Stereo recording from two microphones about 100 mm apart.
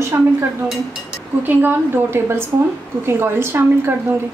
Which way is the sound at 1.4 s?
20° right (ahead or behind).